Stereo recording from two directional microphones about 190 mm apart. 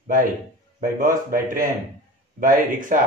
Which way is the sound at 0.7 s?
45° right (ahead or behind).